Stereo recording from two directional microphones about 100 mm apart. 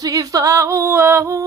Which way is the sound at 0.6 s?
25° right (ahead or behind).